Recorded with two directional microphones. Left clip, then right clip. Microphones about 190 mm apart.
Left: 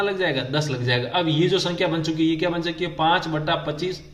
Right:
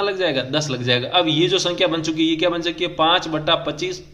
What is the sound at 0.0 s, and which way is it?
Speech, 20° right (ahead or behind).